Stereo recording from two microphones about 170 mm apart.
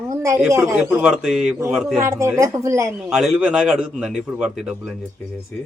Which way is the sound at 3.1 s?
5° right (ahead or behind).